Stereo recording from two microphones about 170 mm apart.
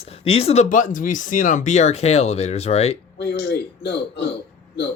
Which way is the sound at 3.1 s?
90° left.